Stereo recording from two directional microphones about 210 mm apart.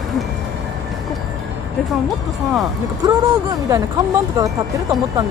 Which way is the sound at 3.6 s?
15° right (ahead or behind).